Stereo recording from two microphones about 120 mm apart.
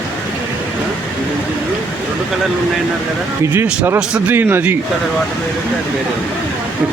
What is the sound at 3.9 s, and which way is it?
Speech, 10° right (ahead or behind).